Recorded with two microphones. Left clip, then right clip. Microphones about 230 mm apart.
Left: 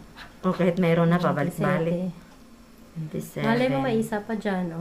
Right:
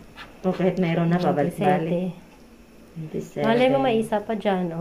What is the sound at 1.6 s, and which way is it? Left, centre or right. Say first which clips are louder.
Speech: right 6 dB; centre.